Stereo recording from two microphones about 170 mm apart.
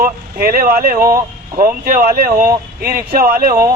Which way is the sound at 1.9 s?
55° right (ahead or behind).